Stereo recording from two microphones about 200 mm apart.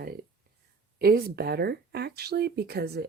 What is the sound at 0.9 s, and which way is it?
Speech, 50° right (ahead or behind).